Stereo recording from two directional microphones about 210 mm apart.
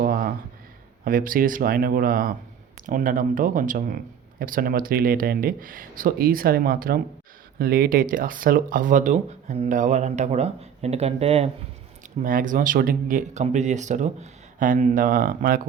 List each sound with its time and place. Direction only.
0.0 s a sound: 40° right (ahead or behind)
1.0 s speech: 40° right (ahead or behind)
12.2 s speech: 40° right (ahead or behind)